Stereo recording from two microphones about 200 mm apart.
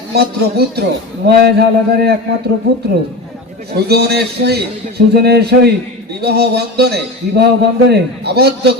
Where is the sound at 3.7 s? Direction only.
55° right (ahead or behind).